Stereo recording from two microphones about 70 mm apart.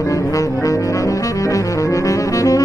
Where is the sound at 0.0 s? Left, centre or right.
Left.